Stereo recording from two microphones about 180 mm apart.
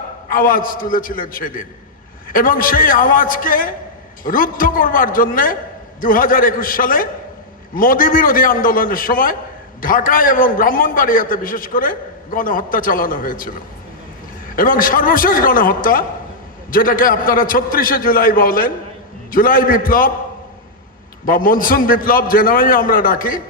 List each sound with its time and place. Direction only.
0.3 s a man's voice: 50° left (ahead or behind)
21.2 s a man's voice: 50° left (ahead or behind)